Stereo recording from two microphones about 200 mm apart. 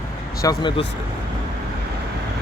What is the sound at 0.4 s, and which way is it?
Speech, 25° left (ahead or behind).